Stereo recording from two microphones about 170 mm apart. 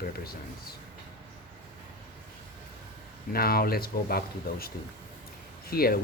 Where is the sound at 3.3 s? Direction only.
60° left (ahead or behind).